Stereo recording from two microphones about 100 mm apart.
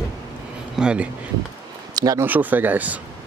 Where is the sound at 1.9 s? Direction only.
35° right (ahead or behind).